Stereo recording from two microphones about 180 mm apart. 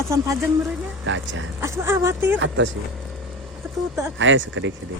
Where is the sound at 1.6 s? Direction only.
15° right (ahead or behind).